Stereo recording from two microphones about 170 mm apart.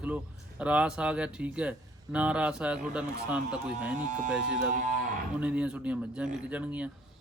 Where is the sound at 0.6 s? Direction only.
5° right (ahead or behind).